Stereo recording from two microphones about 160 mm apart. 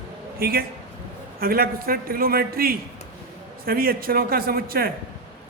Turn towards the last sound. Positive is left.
turn(degrees=-65)  # may be behind; listen again after turning